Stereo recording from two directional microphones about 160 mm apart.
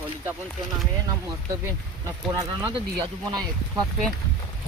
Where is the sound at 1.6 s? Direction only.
20° right (ahead or behind).